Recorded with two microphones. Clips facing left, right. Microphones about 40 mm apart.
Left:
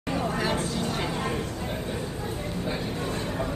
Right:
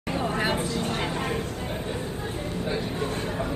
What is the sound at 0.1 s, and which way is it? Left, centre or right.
Vehicle, right.